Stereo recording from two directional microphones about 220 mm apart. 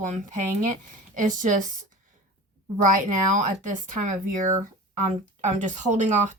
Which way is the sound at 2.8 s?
35° right (ahead or behind).